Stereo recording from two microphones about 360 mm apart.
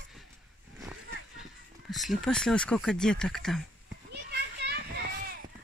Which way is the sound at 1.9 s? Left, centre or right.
Centre.